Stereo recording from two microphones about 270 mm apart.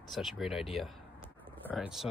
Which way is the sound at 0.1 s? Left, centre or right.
Centre.